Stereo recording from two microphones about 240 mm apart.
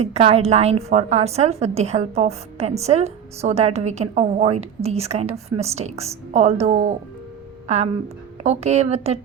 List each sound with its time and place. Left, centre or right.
0.0 s a woman's voice: right